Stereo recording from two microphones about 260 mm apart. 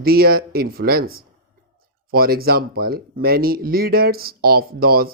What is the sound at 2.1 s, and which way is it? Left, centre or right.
Speech, right.